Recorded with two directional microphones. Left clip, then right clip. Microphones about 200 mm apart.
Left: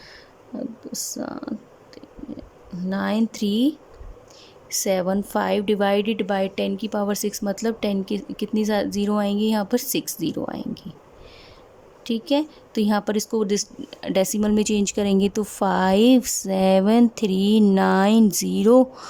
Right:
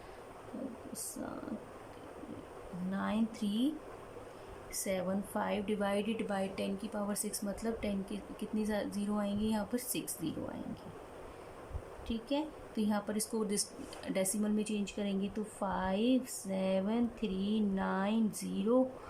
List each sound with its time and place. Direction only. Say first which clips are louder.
2.9 s speech: left 13 dB; 55° left (ahead or behind)
4.8 s a woman's voice: left 14 dB; 55° left (ahead or behind)
12.0 s speech: left 14 dB; 55° left (ahead or behind)